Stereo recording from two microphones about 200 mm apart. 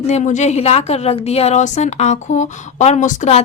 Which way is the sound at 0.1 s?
35° left (ahead or behind).